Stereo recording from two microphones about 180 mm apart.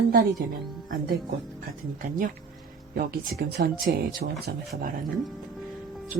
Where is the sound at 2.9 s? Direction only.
55° right (ahead or behind).